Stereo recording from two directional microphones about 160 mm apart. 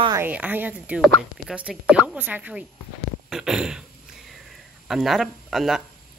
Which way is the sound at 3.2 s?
Centre (ahead or behind).